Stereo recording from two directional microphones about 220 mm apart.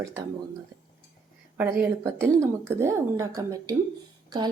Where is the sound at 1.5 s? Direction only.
10° right (ahead or behind).